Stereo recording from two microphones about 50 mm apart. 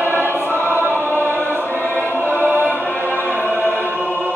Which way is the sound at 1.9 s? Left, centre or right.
Left.